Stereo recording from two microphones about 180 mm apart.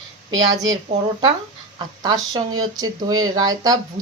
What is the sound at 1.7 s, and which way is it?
A woman's voice, 20° right (ahead or behind).